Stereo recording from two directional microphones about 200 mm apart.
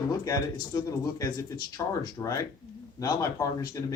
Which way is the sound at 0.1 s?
20° left (ahead or behind).